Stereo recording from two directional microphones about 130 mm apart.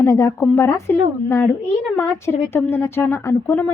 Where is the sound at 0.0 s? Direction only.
20° left (ahead or behind).